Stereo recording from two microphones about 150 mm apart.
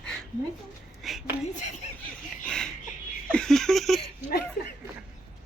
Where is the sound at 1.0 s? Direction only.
Centre (ahead or behind).